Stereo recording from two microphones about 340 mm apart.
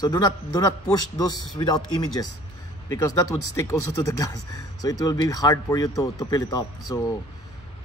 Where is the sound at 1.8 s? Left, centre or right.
Left.